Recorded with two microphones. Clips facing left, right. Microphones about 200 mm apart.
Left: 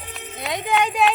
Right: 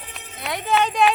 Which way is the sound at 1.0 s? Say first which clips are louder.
Right 1 dB; 5° left (ahead or behind).